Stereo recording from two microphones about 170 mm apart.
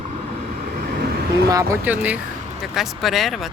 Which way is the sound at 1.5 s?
20° right (ahead or behind).